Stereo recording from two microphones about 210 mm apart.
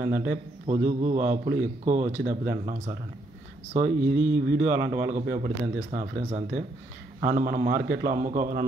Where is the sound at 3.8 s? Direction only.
45° right (ahead or behind).